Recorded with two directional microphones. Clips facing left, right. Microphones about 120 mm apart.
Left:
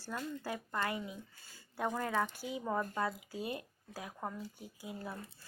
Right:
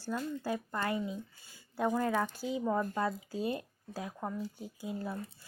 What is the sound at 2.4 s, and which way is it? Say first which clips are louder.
Speech: right 6 dB; 25° right (ahead or behind).